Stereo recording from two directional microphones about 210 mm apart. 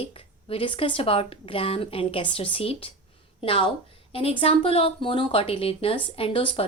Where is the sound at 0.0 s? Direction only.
25° left (ahead or behind).